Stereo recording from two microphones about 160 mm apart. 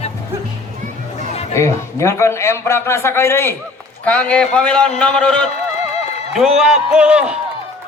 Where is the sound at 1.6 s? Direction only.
20° left (ahead or behind); by 7.4 s 5° right (ahead or behind).